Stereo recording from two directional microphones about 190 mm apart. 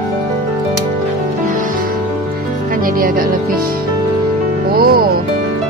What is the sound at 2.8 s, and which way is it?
Speech, 50° right (ahead or behind).